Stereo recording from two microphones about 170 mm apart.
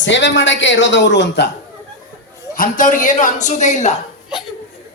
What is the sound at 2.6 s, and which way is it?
A woman's voice, 50° left (ahead or behind).